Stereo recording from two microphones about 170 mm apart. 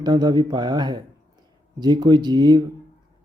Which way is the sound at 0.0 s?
25° right (ahead or behind).